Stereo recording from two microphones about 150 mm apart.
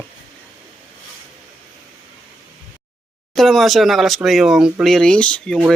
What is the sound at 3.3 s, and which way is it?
Speech, centre (ahead or behind).